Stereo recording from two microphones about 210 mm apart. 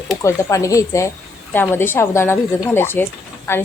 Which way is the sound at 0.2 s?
15° left (ahead or behind).